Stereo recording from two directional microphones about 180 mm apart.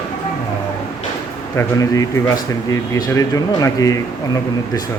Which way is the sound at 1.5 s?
20° left (ahead or behind).